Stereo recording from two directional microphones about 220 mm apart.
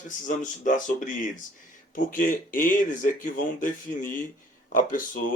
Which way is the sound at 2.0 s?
40° left (ahead or behind).